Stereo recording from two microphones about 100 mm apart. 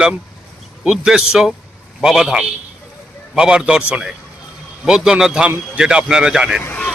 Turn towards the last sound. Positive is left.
turn(degrees=20)  # may be behind; listen again after turning